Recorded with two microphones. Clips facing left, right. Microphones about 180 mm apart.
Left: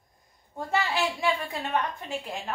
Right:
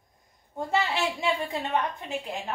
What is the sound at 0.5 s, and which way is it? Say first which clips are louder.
A woman's voice: right 1 dB; 25° right (ahead or behind).